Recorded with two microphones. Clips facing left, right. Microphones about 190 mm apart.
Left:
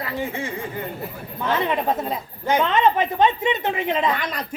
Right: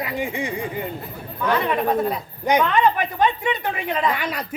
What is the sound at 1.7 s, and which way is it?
Speech, 20° left (ahead or behind).